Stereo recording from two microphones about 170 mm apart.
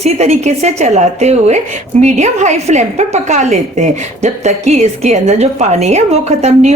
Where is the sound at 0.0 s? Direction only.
40° right (ahead or behind).